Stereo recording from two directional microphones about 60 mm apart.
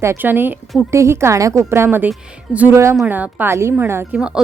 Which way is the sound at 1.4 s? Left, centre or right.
Right.